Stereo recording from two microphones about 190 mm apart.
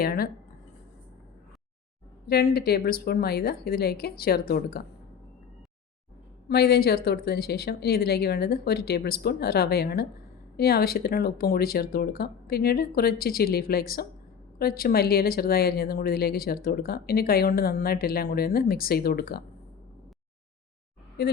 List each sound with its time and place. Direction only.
0.0 s a woman's voice: 55° left (ahead or behind)
2.2 s a woman's voice: 55° left (ahead or behind)
6.5 s a woman's voice: 55° left (ahead or behind)